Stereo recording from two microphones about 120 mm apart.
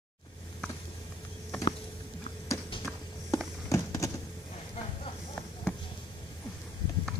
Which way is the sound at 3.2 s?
25° left (ahead or behind).